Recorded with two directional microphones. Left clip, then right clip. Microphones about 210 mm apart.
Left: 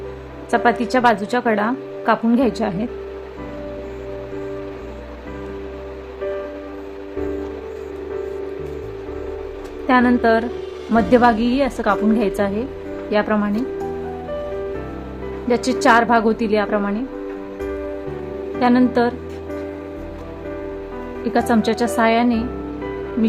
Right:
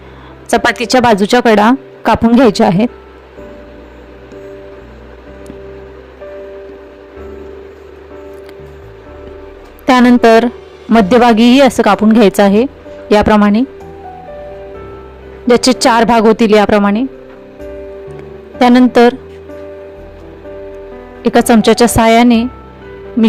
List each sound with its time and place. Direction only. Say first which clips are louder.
0.5 s a woman's voice: right 7 dB; 45° right (ahead or behind)
9.8 s a sound: right 8 dB; 45° right (ahead or behind)
10.9 s a woman's voice: right 7 dB; 45° right (ahead or behind)
15.4 s a woman's voice: right 7 dB; 40° right (ahead or behind)
18.6 s speech: right 10 dB; 40° right (ahead or behind)
21.2 s speech: right 10 dB; 40° right (ahead or behind)